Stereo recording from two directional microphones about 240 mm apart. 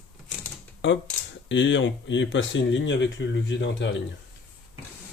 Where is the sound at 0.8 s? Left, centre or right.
Left.